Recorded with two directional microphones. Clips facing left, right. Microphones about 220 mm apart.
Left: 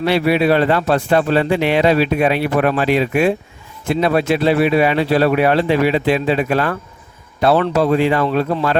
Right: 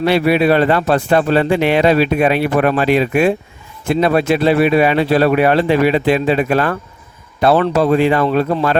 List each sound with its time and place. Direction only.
0.0 s a man's voice: 50° right (ahead or behind)